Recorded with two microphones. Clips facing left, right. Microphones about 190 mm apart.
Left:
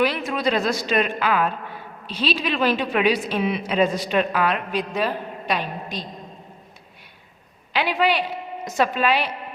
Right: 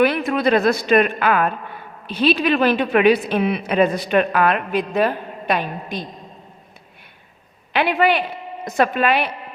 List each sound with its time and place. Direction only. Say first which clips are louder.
0.0 s speech: right 5 dB; 60° right (ahead or behind)
7.7 s speech: right 4 dB; 55° right (ahead or behind)